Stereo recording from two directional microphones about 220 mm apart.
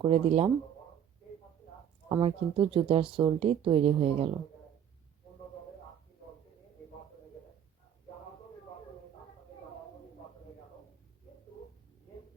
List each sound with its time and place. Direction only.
0.0 s speech: 25° right (ahead or behind)
2.0 s speech: 20° right (ahead or behind)